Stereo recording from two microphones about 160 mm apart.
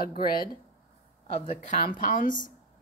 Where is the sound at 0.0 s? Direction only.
70° left (ahead or behind).